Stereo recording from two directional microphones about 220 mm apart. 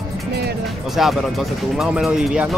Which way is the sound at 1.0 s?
Centre (ahead or behind).